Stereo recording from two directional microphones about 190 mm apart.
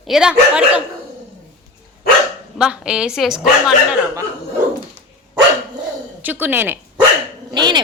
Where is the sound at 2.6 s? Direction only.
5° right (ahead or behind).